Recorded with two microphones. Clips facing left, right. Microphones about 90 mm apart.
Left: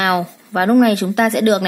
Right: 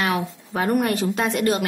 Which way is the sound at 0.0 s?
75° left (ahead or behind).